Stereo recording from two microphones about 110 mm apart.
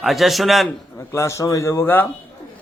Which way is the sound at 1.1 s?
25° left (ahead or behind).